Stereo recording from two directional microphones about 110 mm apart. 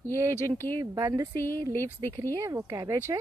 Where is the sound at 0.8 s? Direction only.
35° right (ahead or behind).